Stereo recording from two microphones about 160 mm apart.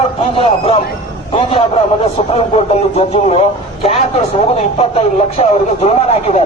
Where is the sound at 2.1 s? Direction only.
40° left (ahead or behind).